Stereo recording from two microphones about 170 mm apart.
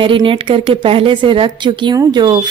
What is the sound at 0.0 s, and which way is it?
A woman's voice, 30° right (ahead or behind).